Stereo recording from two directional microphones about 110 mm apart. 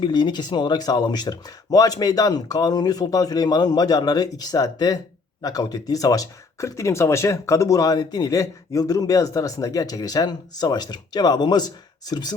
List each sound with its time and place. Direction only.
0.0 s speech: 40° left (ahead or behind)